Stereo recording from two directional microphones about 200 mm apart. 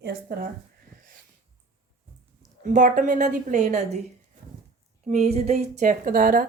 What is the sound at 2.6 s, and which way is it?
Speech, 40° right (ahead or behind).